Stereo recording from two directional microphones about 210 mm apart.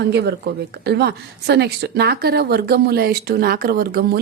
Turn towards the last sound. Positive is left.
turn(degrees=-45)  # may be behind; listen again after turning